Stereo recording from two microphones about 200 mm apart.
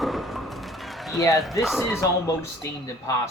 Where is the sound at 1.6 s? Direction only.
Centre (ahead or behind).